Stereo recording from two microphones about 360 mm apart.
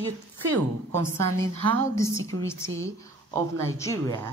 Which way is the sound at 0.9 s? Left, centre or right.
Centre.